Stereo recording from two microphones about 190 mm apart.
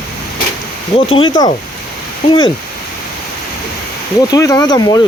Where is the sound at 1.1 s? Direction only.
25° left (ahead or behind).